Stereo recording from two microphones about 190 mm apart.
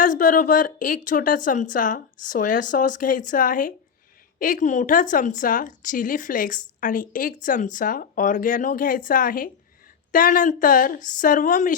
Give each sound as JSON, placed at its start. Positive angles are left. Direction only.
{"t": 0.0, "sound": "speech", "side_deg": 45}